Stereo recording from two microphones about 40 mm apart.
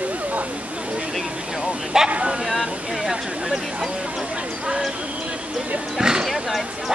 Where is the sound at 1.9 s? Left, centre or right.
Centre.